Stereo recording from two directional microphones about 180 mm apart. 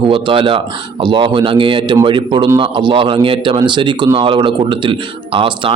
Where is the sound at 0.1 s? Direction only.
30° right (ahead or behind).